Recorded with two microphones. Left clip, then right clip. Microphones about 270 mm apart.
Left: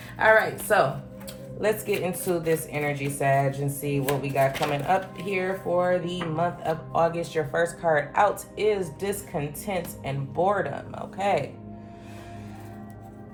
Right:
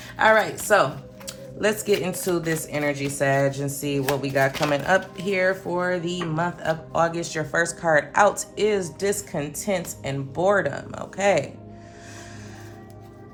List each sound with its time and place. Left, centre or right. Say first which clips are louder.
0.2 s a woman's voice: right 1 dB; right
1.6 s speech: right 3 dB; right